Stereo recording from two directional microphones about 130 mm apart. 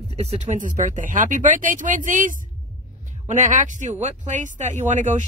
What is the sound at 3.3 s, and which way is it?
Speech, 80° right.